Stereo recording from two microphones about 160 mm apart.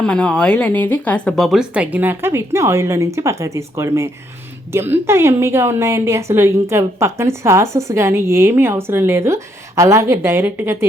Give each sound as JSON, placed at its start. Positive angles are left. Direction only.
{"t": 0.0, "sound": "a woman's voice", "side_deg": 5}